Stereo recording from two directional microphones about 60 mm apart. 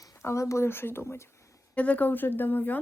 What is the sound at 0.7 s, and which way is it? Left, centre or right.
Speech, left.